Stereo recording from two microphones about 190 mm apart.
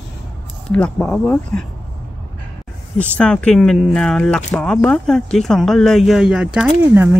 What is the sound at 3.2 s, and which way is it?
Speech, 5° left (ahead or behind).